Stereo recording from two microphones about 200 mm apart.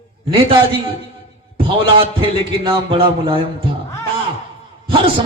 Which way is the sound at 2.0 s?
25° right (ahead or behind).